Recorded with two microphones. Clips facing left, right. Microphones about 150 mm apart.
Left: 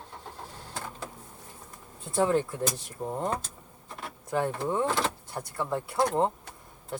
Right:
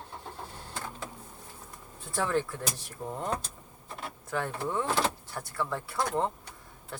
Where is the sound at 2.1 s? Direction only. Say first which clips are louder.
Left 4 dB; 20° left (ahead or behind).